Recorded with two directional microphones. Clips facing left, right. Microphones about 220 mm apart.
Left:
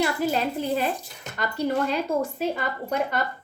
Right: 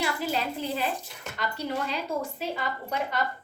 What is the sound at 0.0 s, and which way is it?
A woman's voice, 45° left (ahead or behind).